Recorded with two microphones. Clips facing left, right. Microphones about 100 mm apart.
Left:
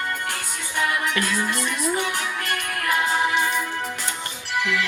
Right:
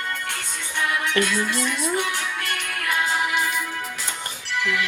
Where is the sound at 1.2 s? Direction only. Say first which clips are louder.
Right 2 dB; 5° left (ahead or behind).